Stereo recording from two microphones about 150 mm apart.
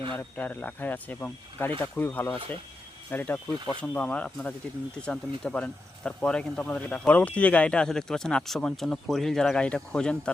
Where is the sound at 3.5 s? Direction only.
30° right (ahead or behind).